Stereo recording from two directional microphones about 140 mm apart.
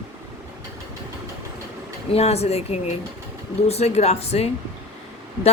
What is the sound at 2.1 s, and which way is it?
A woman's voice, 45° left (ahead or behind).